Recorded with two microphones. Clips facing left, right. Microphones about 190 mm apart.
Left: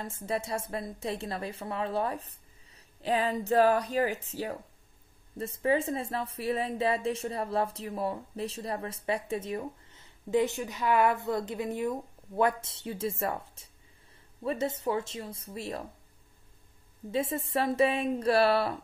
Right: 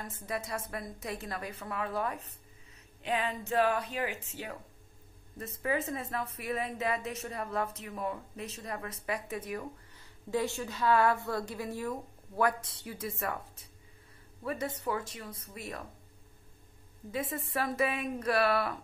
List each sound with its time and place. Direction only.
0.0 s a woman's voice: 30° left (ahead or behind)
17.1 s a woman's voice: 25° left (ahead or behind)